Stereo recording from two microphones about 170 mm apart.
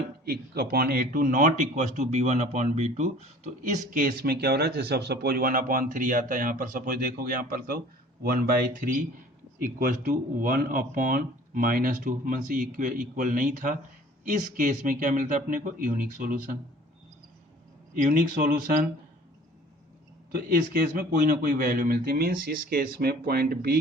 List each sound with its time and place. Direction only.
0.3 s speech: 65° right (ahead or behind)
18.0 s speech: 55° right (ahead or behind)
20.3 s speech: 60° right (ahead or behind)